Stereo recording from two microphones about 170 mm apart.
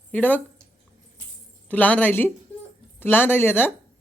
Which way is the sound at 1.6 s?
10° left (ahead or behind).